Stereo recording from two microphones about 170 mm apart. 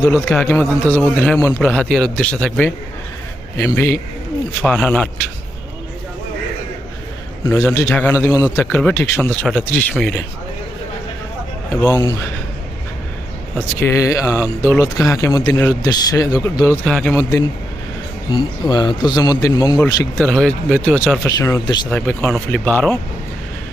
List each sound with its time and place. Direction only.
0.3 s speech: 5° left (ahead or behind)
7.4 s a man's voice: 15° left (ahead or behind)
11.7 s speech: 15° left (ahead or behind)
13.7 s speech: 15° left (ahead or behind)
16.8 s a man's voice: 5° left (ahead or behind)
18.3 s speech: 25° left (ahead or behind)
20.1 s speech: centre (ahead or behind); by 21.8 s 20° left (ahead or behind)
21.8 s speech: 5° left (ahead or behind)